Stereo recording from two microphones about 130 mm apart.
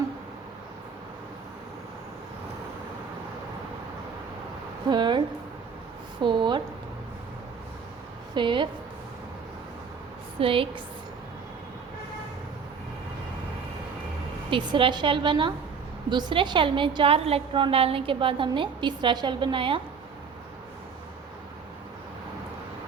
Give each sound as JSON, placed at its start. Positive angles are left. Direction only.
{"t": 4.9, "sound": "a woman's voice", "side_deg": -35}
{"t": 6.2, "sound": "a woman's voice", "side_deg": -35}
{"t": 8.4, "sound": "a woman's voice", "side_deg": -40}
{"t": 10.4, "sound": "a woman's voice", "side_deg": -45}
{"t": 14.5, "sound": "a woman's voice", "side_deg": -40}